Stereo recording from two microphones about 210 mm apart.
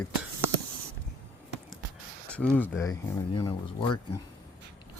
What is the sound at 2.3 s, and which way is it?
Speech, 5° left (ahead or behind).